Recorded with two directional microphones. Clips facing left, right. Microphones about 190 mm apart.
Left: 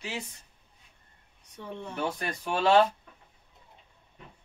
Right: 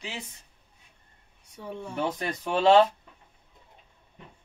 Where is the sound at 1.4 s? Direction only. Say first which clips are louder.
Right 2 dB; 10° right (ahead or behind).